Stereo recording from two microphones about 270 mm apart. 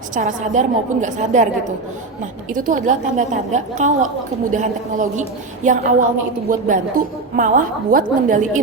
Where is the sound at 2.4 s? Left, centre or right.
Right.